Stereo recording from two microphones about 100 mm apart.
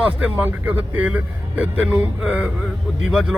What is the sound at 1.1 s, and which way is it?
Speech, 15° right (ahead or behind).